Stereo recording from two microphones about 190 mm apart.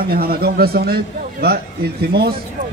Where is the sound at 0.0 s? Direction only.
55° right (ahead or behind).